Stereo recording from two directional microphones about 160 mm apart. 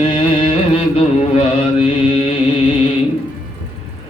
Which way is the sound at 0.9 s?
35° left (ahead or behind).